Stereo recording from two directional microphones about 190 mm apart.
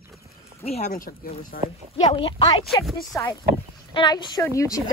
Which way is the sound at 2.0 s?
30° left (ahead or behind).